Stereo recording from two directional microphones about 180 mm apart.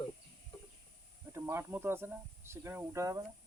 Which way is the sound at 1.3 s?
15° right (ahead or behind).